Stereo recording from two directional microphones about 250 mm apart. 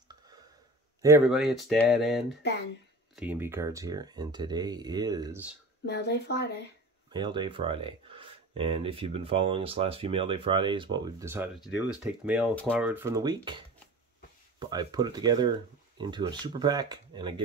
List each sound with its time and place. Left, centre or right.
1.0 s speech: centre
5.9 s speech: left
7.1 s speech: centre
11.6 s speech: centre
12.0 s speech: centre